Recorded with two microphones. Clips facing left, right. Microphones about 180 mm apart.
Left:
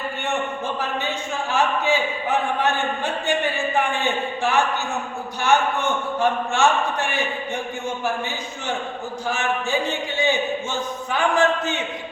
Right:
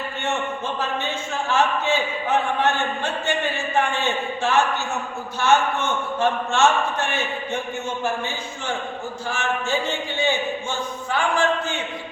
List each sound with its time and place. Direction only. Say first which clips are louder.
0.8 s a sound: even; 15° left (ahead or behind)
5.4 s a man's voice: even; 15° left (ahead or behind)
9.2 s a man's voice: left 2 dB; 15° left (ahead or behind)